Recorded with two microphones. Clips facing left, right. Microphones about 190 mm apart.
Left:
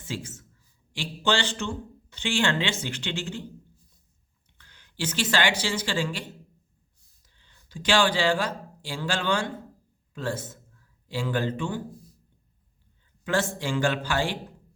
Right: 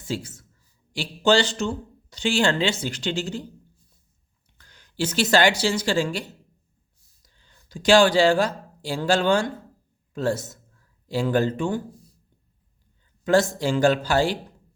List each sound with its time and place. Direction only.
0.0 s a man's voice: 40° right (ahead or behind)
4.5 s speech: 45° right (ahead or behind)
7.2 s a sound: 45° right (ahead or behind)
8.9 s speech: 40° right (ahead or behind)
13.2 s speech: 40° right (ahead or behind)